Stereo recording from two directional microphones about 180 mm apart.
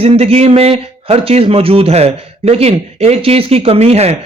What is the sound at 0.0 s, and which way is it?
Speech, 35° right (ahead or behind).